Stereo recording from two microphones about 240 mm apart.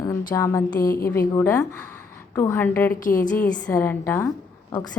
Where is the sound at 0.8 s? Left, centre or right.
Left.